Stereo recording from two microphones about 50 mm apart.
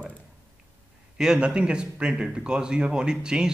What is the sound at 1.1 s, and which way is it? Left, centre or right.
Speech, centre.